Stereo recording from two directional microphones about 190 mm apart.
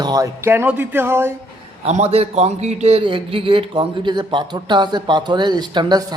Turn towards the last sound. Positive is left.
turn(degrees=-25)  # may be behind; listen again after turning